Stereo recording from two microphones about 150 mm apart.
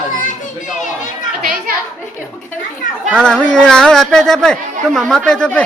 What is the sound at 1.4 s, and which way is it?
Chatter, 70° right (ahead or behind).